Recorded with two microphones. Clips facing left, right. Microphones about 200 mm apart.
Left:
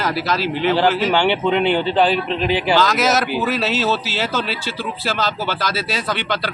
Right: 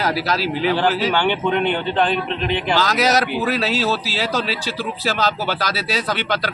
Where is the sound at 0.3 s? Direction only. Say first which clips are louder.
Even; 40° right (ahead or behind).